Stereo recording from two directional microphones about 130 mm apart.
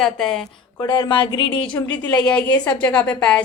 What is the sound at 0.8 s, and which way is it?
Speech, 35° left (ahead or behind).